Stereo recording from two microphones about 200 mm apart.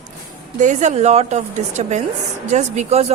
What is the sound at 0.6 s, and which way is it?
A woman's voice, 35° right (ahead or behind).